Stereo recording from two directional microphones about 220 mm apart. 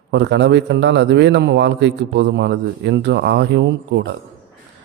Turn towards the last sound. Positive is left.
turn(degrees=-50)  # may be behind; listen again after turning